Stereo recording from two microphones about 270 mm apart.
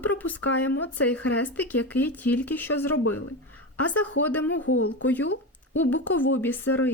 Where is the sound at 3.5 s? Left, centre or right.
Centre.